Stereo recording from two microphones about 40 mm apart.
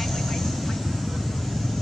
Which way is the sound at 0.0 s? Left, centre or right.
Centre.